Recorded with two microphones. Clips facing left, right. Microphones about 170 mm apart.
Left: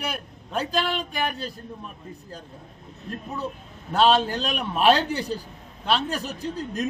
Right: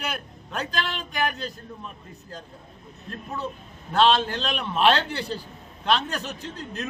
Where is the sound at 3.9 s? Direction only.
10° left (ahead or behind).